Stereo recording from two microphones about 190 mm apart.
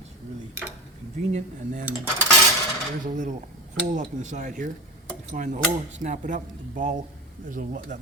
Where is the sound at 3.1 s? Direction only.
40° right (ahead or behind).